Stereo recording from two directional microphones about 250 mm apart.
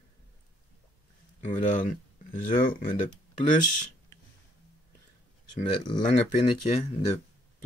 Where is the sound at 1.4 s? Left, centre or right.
Left.